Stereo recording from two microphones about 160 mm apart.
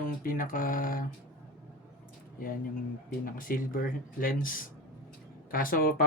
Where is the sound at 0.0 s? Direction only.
60° left (ahead or behind).